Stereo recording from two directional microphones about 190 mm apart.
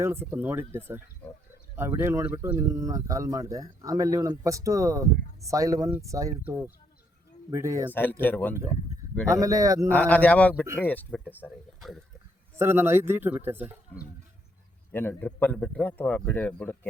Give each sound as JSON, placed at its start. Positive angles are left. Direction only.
{"t": 0.0, "sound": "speech", "side_deg": -10}
{"t": 7.9, "sound": "a man's voice", "side_deg": 10}
{"t": 9.3, "sound": "speech", "side_deg": -15}
{"t": 9.9, "sound": "a man's voice", "side_deg": 10}
{"t": 12.5, "sound": "speech", "side_deg": -10}
{"t": 14.9, "sound": "a man's voice", "side_deg": 10}